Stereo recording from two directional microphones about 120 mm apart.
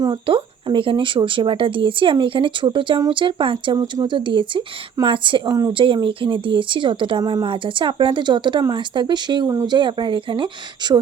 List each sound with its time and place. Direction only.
0.3 s speech: 45° right (ahead or behind)